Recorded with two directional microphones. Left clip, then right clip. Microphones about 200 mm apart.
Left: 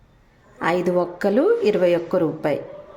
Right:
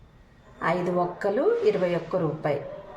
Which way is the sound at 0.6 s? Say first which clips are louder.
Left 5 dB; 55° left (ahead or behind).